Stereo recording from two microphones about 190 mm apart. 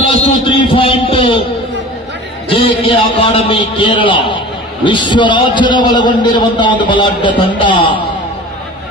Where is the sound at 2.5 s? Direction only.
30° left (ahead or behind).